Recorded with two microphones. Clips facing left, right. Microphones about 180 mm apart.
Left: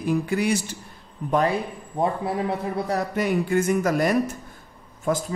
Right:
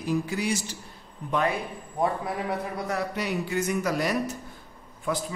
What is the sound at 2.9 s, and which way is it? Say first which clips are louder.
A man's voice: left 5 dB; 45° left (ahead or behind).